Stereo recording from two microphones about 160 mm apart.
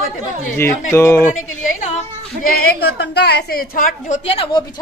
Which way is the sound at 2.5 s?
85° left.